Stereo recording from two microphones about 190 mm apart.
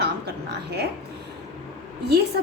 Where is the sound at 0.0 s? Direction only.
60° right (ahead or behind).